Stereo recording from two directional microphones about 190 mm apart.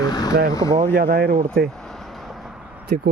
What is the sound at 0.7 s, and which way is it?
Speech, 45° right (ahead or behind).